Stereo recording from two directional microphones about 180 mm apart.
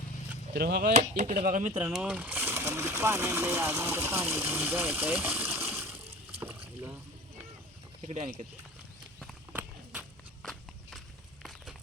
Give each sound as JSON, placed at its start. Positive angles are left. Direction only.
{"t": 0.5, "sound": "speech", "side_deg": -60}
{"t": 0.9, "sound": "speech", "side_deg": -45}
{"t": 1.9, "sound": "speech", "side_deg": -5}
{"t": 6.4, "sound": "rowboat", "side_deg": -10}
{"t": 8.0, "sound": "speech", "side_deg": -40}
{"t": 9.1, "sound": "clip-clop", "side_deg": 0}
{"t": 9.6, "sound": "walk", "side_deg": -5}